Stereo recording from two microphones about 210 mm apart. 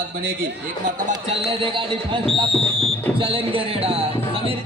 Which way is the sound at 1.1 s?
25° right (ahead or behind).